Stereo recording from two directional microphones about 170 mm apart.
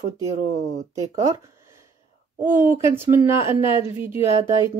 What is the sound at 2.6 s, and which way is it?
Speech, 10° right (ahead or behind).